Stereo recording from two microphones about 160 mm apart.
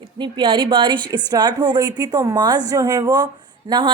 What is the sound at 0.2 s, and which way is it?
A woman's voice, 30° right (ahead or behind).